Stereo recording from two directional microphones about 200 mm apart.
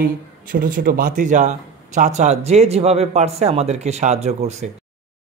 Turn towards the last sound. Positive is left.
turn(degrees=-35)  # may be behind; listen again after turning